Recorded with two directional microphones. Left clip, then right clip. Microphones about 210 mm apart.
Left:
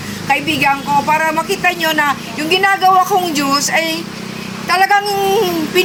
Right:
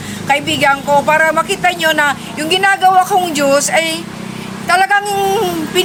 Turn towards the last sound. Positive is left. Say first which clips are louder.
# left 1 dB
turn(degrees=0)  # may be behind; listen again after turning